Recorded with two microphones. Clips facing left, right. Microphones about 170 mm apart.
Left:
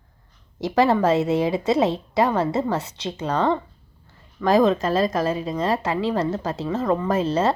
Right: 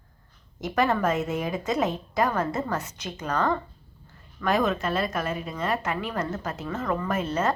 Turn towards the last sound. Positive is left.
turn(degrees=30)  # may be behind; listen again after turning